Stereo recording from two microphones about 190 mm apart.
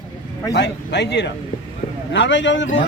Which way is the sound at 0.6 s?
65° left (ahead or behind).